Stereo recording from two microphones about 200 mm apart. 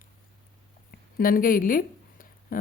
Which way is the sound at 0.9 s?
45° left (ahead or behind).